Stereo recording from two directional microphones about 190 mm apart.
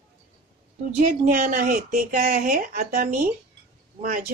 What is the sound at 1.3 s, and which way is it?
Speech, 45° right (ahead or behind).